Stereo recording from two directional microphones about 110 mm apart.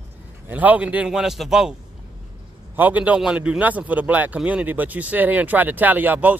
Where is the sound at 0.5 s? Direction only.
15° right (ahead or behind).